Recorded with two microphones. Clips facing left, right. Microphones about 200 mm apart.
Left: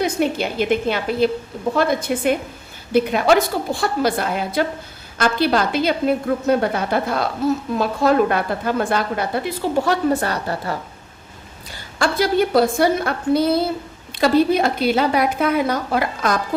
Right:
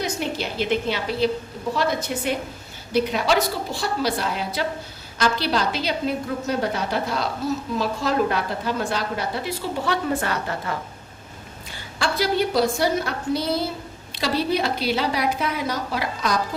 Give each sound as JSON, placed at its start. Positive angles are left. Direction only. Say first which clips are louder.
{"t": 0.0, "sound": "a woman's voice", "louder": "left 7 dB", "side_deg": 55}
{"t": 11.9, "sound": "a woman's voice", "louder": "left 5 dB", "side_deg": 50}